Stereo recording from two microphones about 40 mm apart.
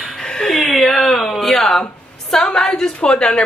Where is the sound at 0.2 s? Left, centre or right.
Centre.